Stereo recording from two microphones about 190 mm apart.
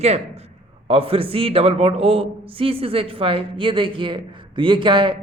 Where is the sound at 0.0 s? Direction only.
35° right (ahead or behind).